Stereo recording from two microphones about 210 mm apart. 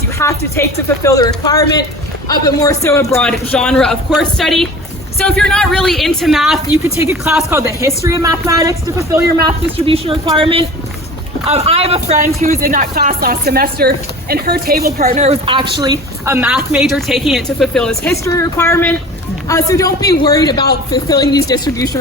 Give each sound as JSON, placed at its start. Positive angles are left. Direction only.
{"t": 0.2, "sound": "a woman's voice", "side_deg": 15}
{"t": 9.7, "sound": "speech", "side_deg": -25}
{"t": 12.4, "sound": "a woman's voice", "side_deg": -40}
{"t": 15.2, "sound": "speech", "side_deg": -25}